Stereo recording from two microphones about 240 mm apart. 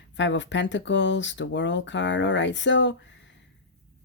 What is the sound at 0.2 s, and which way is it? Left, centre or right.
A woman's voice, left.